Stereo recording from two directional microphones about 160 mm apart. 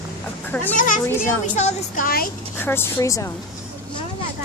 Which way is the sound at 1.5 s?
45° left (ahead or behind).